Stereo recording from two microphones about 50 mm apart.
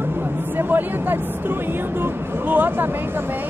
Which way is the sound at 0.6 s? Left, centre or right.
Right.